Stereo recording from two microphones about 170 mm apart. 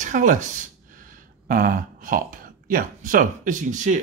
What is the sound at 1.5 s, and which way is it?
Speech, 55° right (ahead or behind).